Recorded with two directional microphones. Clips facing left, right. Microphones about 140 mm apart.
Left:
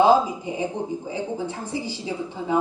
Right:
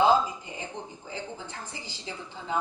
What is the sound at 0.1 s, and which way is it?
A woman's voice, 10° left (ahead or behind).